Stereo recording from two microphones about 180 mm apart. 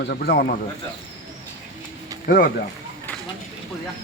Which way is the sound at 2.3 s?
55° left (ahead or behind).